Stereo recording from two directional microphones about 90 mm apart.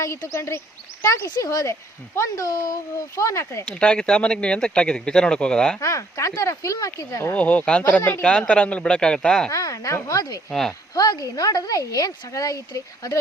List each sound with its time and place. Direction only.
0.0 s a woman's voice: 35° left (ahead or behind)
3.7 s speech: 10° left (ahead or behind)
5.8 s a woman's voice: 35° left (ahead or behind)
7.3 s speech: 15° left (ahead or behind)
9.5 s a woman's voice: 35° left (ahead or behind)
10.5 s speech: 5° left (ahead or behind)
10.9 s a woman's voice: 45° left (ahead or behind)